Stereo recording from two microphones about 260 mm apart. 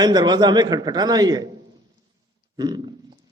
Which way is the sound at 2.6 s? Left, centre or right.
Centre.